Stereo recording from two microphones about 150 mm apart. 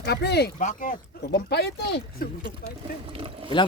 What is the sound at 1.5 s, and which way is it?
Speech, 90° left.